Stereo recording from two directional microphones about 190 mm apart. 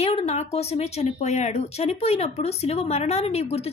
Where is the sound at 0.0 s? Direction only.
35° left (ahead or behind).